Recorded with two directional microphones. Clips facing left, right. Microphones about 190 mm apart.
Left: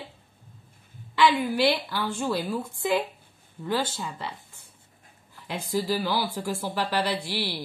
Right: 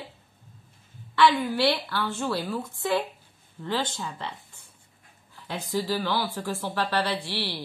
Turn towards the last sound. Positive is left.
turn(degrees=10)  # may be behind; listen again after turning